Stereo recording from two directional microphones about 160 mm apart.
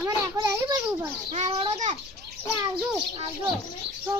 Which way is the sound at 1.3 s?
40° right (ahead or behind).